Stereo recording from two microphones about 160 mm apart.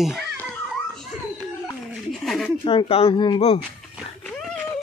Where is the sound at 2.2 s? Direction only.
Centre (ahead or behind).